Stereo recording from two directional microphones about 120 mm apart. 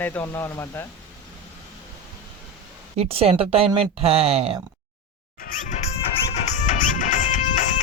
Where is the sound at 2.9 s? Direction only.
55° right (ahead or behind).